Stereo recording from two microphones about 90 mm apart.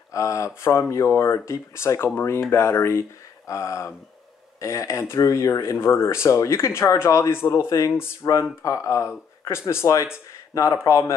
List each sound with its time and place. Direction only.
0.1 s speech: 35° left (ahead or behind)